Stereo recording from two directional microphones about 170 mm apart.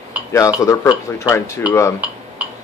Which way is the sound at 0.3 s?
20° left (ahead or behind).